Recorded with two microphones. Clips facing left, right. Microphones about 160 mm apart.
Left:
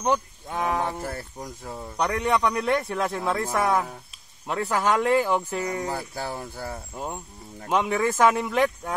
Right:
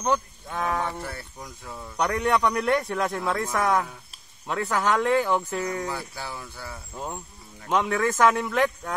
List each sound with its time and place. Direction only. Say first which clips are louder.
0.0 s speech: left 1 dB; 20° left (ahead or behind)
1.0 s speech: left 4 dB; 40° left (ahead or behind)
2.0 s a man's voice: even; centre (ahead or behind); by 5.9 s 15° left (ahead or behind)
5.9 s speech: left 3 dB; 40° left (ahead or behind)
7.7 s speech: even; 5° left (ahead or behind)